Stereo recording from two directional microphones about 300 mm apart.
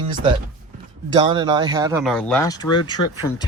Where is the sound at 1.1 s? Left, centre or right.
Centre.